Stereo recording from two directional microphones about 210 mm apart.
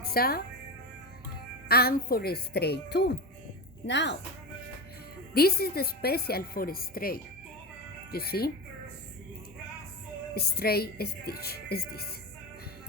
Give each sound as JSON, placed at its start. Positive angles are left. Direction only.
{"t": 0.0, "sound": "speech", "side_deg": 45}
{"t": 1.6, "sound": "speech", "side_deg": 45}
{"t": 5.3, "sound": "speech", "side_deg": 45}
{"t": 10.3, "sound": "speech", "side_deg": 45}